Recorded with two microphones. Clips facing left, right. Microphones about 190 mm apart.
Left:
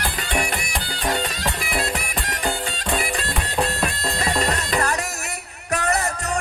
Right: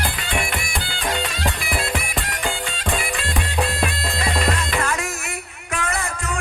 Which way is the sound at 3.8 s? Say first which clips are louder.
Even; 40° left (ahead or behind).